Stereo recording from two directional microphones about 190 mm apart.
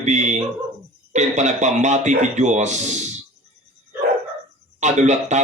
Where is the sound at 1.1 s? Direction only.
40° right (ahead or behind).